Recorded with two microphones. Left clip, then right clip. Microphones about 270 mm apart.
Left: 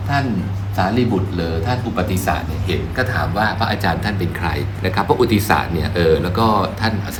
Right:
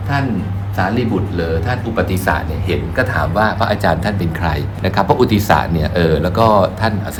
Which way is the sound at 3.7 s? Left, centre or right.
Right.